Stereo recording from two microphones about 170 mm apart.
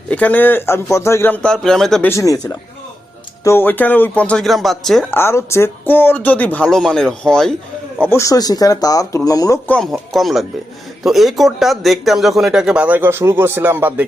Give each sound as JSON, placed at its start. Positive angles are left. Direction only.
{"t": 0.1, "sound": "speech", "side_deg": 10}
{"t": 2.0, "sound": "speech", "side_deg": 20}
{"t": 5.1, "sound": "speech", "side_deg": 15}
{"t": 8.0, "sound": "speech", "side_deg": 15}
{"t": 9.6, "sound": "speech", "side_deg": 5}